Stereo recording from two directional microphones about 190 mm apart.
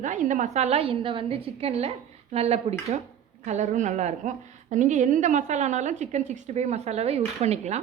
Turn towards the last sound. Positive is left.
turn(degrees=-35)  # may be behind; listen again after turning